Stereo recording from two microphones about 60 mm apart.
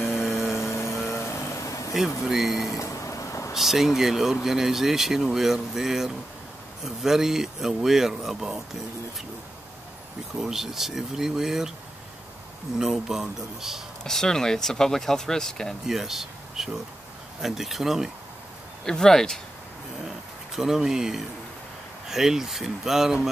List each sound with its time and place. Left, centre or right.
0.0 s vehicle: left
2.2 s speech: centre
2.7 s vehicle: left
3.5 s speech: centre
10.4 s speech: centre
12.7 s speech: centre
14.0 s speech: centre
15.9 s speech: centre
18.9 s speech: centre
20.5 s speech: centre